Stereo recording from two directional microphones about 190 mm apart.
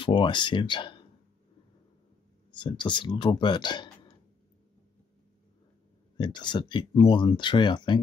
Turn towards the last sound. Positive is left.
turn(degrees=25)  # may be behind; listen again after turning